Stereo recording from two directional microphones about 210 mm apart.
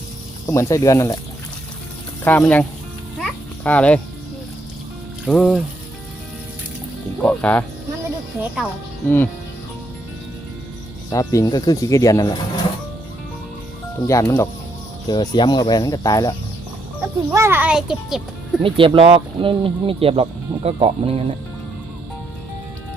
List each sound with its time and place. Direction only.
0.4 s speech: 15° left (ahead or behind)
2.2 s speech: 10° left (ahead or behind)
3.2 s a sound: 5° left (ahead or behind)
5.3 s speech: 5° left (ahead or behind)
7.2 s speech: 5° left (ahead or behind)
9.0 s speech: 10° left (ahead or behind)
11.1 s speech: 15° left (ahead or behind)
14.1 s speech: 15° left (ahead or behind)
17.3 s a child's voice: 10° right (ahead or behind)
18.6 s speech: 25° right (ahead or behind)